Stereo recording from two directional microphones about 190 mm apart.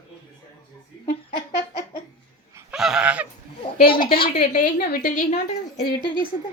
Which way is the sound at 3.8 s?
50° left (ahead or behind).